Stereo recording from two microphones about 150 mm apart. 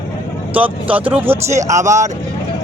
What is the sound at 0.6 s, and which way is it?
Speech, 10° right (ahead or behind).